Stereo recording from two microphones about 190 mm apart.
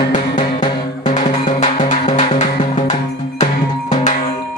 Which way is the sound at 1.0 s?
40° left (ahead or behind).